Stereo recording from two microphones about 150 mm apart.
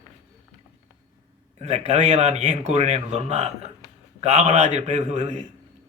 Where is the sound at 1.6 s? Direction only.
50° right (ahead or behind).